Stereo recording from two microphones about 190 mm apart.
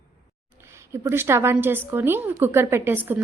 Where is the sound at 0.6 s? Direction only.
15° right (ahead or behind).